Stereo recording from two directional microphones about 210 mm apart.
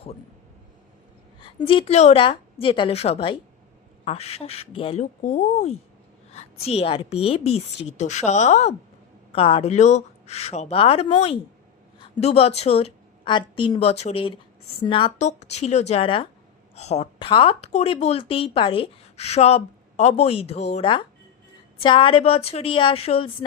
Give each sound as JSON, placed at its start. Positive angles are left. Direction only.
{"t": 1.4, "sound": "a woman's voice", "side_deg": 25}